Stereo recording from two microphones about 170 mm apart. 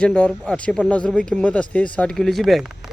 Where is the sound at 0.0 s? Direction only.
5° left (ahead or behind).